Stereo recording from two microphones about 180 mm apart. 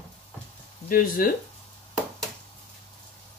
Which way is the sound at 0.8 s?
50° left (ahead or behind).